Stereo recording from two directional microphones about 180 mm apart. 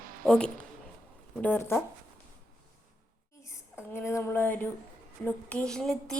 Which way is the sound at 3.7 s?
15° left (ahead or behind).